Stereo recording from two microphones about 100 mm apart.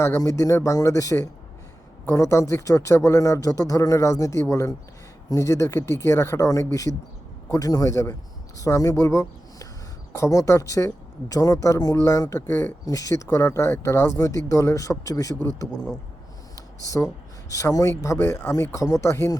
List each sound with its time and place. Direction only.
0.0 s speech: 30° left (ahead or behind)
17.5 s speech: 35° left (ahead or behind)